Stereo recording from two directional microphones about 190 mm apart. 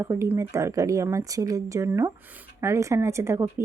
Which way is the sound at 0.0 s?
15° right (ahead or behind).